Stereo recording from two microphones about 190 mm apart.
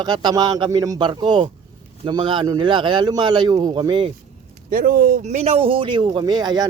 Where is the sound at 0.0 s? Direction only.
20° right (ahead or behind).